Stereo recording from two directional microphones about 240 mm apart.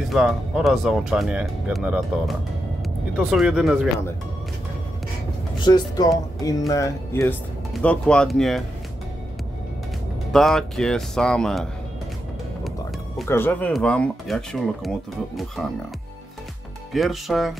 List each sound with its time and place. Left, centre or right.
0.0 s speech: centre
5.6 s speech: centre
10.3 s speech: centre
13.3 s speech: centre
16.9 s speech: centre